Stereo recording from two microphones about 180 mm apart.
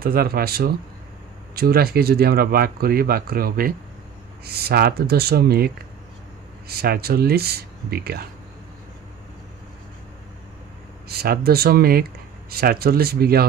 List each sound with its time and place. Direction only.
0.0 s speech: 55° right (ahead or behind)
6.7 s speech: 60° right (ahead or behind)
11.1 s speech: 60° right (ahead or behind)